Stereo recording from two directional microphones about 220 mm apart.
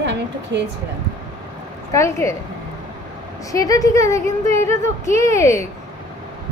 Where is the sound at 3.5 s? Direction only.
15° left (ahead or behind).